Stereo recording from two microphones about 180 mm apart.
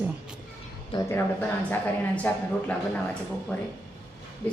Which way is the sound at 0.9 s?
30° left (ahead or behind).